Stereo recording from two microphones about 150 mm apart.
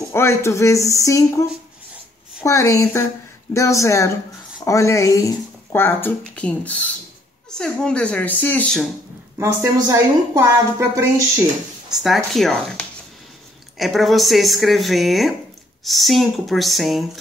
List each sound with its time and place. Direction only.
0.1 s speech: 20° left (ahead or behind)
9.4 s a woman's voice: 20° right (ahead or behind)
11.9 s speech: centre (ahead or behind)